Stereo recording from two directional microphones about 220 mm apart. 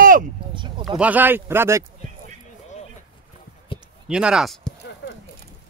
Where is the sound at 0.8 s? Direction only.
5° right (ahead or behind).